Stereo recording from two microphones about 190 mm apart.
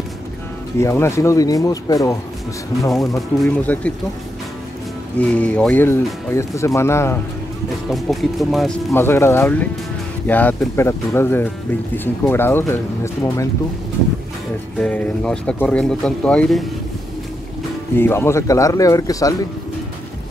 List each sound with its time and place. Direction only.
0.7 s speech: 15° left (ahead or behind)
3.2 s speech: 5° left (ahead or behind)
5.2 s speech: 5° left (ahead or behind)
7.9 s speech: centre (ahead or behind)
8.9 s speech: 15° left (ahead or behind)
14.8 s speech: 5° left (ahead or behind)
17.9 s speech: 10° left (ahead or behind)